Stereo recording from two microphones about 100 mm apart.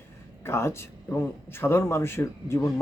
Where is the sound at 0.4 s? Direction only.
25° left (ahead or behind).